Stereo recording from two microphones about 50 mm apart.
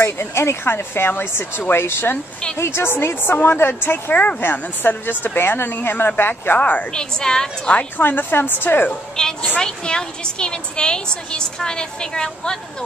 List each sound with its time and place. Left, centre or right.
0.0 s a woman's voice: left
4.1 s a woman's voice: left
6.6 s a woman's voice: left
6.9 s a woman's voice: centre
8.0 s a woman's voice: left
9.2 s a woman's voice: centre